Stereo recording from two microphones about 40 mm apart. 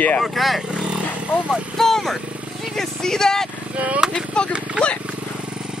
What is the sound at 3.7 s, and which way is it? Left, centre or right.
Speech, right.